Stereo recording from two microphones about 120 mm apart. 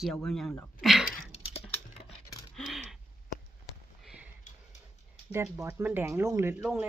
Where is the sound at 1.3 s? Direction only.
60° left (ahead or behind).